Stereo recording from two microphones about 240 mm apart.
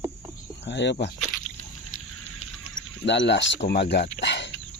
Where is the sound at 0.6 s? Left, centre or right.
Left.